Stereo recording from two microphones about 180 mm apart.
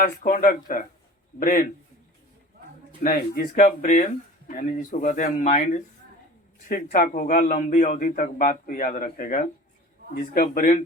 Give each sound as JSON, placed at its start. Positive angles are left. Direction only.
{"t": 0.0, "sound": "speech", "side_deg": 50}
{"t": 3.0, "sound": "speech", "side_deg": 50}